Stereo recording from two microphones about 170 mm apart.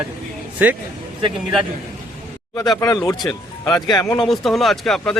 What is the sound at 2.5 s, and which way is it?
Speech, 20° left (ahead or behind).